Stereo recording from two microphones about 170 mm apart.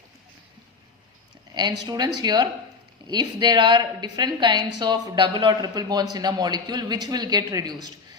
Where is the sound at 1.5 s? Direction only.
25° right (ahead or behind).